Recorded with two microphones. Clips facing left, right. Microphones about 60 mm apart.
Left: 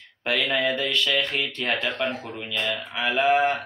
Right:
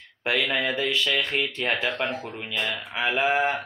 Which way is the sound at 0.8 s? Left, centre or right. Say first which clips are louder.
Left 1 dB; centre.